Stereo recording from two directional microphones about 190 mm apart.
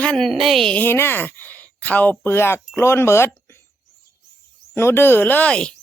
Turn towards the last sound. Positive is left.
turn(degrees=5)  # may be behind; listen again after turning